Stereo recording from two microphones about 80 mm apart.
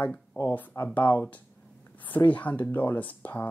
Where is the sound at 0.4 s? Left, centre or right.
Left.